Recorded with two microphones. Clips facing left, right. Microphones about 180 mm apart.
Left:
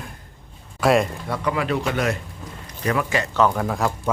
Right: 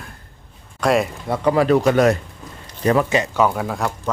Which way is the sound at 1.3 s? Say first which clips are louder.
Right 11 dB; 35° right (ahead or behind).